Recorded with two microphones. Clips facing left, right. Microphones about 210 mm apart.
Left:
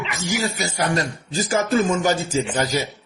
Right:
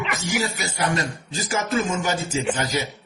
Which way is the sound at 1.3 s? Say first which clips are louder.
Left 6 dB; 35° left (ahead or behind).